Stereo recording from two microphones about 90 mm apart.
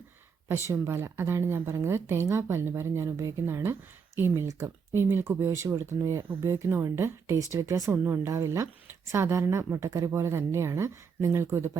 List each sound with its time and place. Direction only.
0.7 s speech: 30° right (ahead or behind)